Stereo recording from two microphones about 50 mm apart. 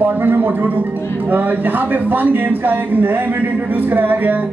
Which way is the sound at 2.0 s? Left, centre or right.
Right.